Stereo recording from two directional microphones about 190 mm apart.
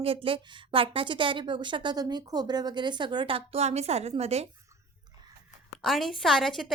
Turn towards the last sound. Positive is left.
turn(degrees=0)  # may be behind; listen again after turning